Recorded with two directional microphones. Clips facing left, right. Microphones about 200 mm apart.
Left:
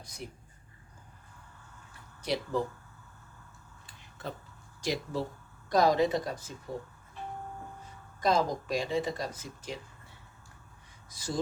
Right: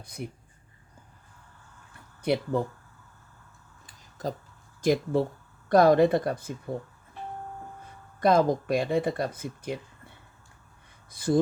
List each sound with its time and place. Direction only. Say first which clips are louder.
0.2 s speech: right 6 dB; 55° right (ahead or behind)
2.2 s speech: right 6 dB; 55° right (ahead or behind)
4.2 s speech: right 7 dB; 40° right (ahead or behind)
4.8 s speech: right 9 dB; 50° right (ahead or behind)
8.2 s speech: right 6 dB; 55° right (ahead or behind)